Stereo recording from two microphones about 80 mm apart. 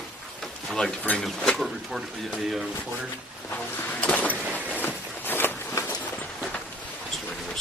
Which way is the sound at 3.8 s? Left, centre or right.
Centre.